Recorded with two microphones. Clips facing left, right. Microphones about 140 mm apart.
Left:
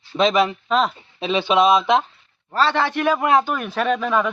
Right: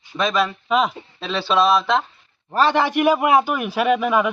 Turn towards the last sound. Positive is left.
turn(degrees=-10)  # may be behind; listen again after turning